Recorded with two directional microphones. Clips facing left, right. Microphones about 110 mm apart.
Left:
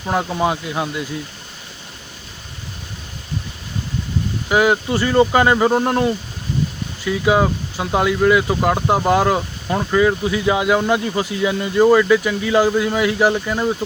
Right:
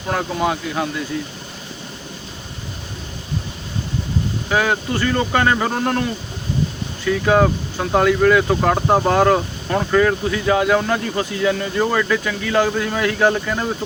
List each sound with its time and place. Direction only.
0.1 s speech: 20° left (ahead or behind)
4.4 s speech: 15° left (ahead or behind)